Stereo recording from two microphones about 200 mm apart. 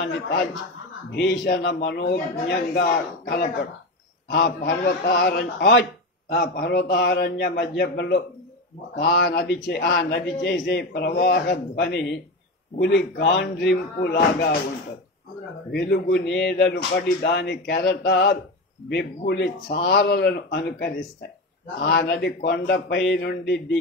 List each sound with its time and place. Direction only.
1.4 s a man's voice: 55° left (ahead or behind)
15.7 s a man's voice: 60° left (ahead or behind)
19.7 s a man's voice: 50° left (ahead or behind)